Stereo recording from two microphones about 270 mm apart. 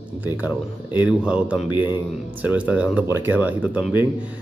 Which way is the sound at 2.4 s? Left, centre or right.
Centre.